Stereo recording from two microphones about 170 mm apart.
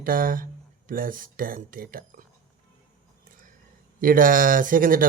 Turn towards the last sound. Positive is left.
turn(degrees=-55)  # may be behind; listen again after turning